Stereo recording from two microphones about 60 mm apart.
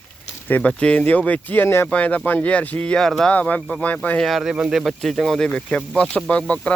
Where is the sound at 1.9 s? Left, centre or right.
Left.